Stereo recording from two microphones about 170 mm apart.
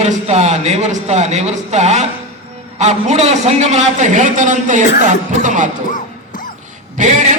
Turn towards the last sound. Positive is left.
turn(degrees=-50)  # may be behind; listen again after turning